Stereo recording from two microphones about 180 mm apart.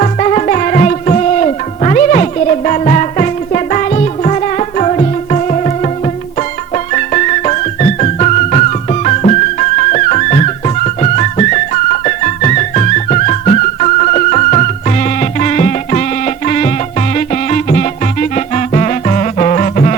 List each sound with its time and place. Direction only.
0.0 s music: 40° left (ahead or behind)